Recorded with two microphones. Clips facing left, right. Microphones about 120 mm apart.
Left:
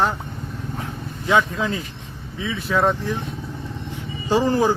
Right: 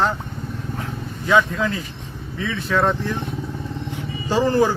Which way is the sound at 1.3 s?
20° left (ahead or behind).